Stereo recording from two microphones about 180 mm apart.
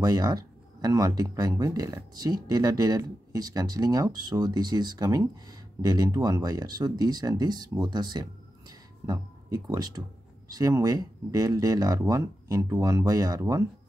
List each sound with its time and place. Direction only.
0.0 s speech: 20° right (ahead or behind)